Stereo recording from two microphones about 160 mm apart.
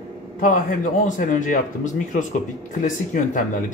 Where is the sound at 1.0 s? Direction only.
55° left (ahead or behind).